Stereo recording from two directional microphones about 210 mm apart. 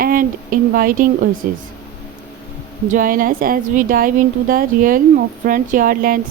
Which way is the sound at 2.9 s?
40° right (ahead or behind).